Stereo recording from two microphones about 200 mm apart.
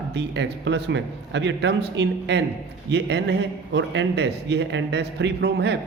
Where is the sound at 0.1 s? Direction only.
60° right (ahead or behind).